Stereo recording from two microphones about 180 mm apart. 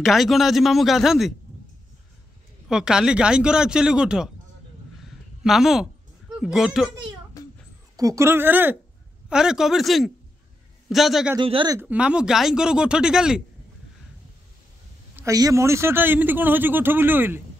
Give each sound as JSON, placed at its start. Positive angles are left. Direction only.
{"t": 0.0, "sound": "speech", "side_deg": 0}
{"t": 2.7, "sound": "speech", "side_deg": -5}
{"t": 5.4, "sound": "speech", "side_deg": 0}
{"t": 7.4, "sound": "a sound", "side_deg": 20}
{"t": 7.9, "sound": "speech", "side_deg": -20}
{"t": 11.3, "sound": "speech", "side_deg": -25}
{"t": 11.8, "sound": "speech", "side_deg": -5}
{"t": 15.1, "sound": "speech", "side_deg": -20}